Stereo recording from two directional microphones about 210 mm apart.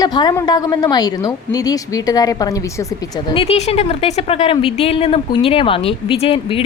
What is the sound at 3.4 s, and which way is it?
A woman's voice, 30° left (ahead or behind).